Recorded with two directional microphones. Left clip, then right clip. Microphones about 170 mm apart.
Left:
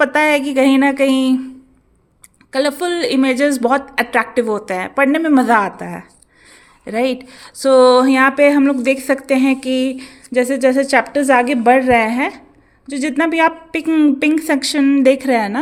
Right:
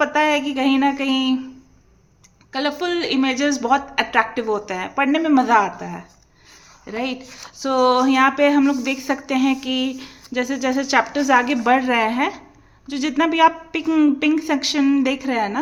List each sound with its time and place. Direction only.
0.0 s a woman's voice: 50° left (ahead or behind)
2.5 s a woman's voice: 40° left (ahead or behind)